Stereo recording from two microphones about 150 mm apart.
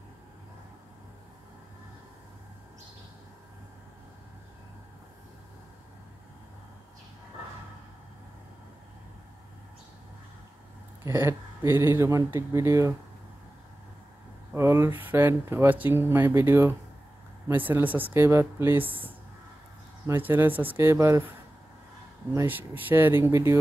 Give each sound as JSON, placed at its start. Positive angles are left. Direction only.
{"t": 11.1, "sound": "speech", "side_deg": -15}
{"t": 14.5, "sound": "speech", "side_deg": -15}
{"t": 20.1, "sound": "speech", "side_deg": -15}
{"t": 22.3, "sound": "speech", "side_deg": -15}